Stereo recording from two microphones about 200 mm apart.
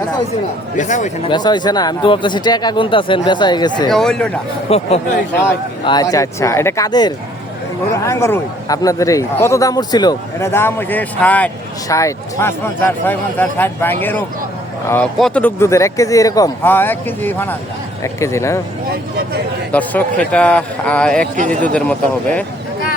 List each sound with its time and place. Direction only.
0.8 s speech: 35° left (ahead or behind)
1.3 s speech: 20° left (ahead or behind)
3.8 s speech: centre (ahead or behind)
4.7 s speech: 30° left (ahead or behind); by 18.6 s 15° left (ahead or behind)
19.7 s speech: 5° left (ahead or behind)
21.3 s a man's voice: 40° right (ahead or behind)